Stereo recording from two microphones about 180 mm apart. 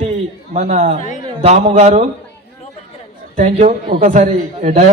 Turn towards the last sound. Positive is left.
turn(degrees=-40)  # may be behind; listen again after turning